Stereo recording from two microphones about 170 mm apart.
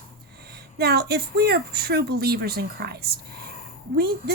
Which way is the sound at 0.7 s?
70° right (ahead or behind).